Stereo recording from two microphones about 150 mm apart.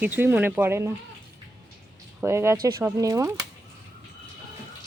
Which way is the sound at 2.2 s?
15° right (ahead or behind).